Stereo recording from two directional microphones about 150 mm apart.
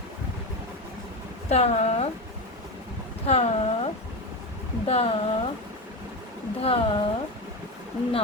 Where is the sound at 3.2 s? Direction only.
45° left (ahead or behind).